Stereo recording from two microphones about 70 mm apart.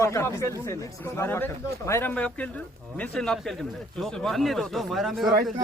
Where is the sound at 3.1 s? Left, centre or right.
Centre.